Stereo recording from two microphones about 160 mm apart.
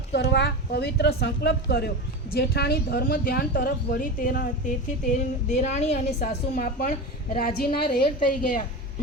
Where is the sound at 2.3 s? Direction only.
80° left; by 5.9 s 45° left (ahead or behind).